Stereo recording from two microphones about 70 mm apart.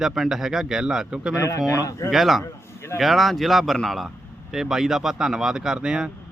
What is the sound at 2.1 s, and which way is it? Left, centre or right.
Speech, centre.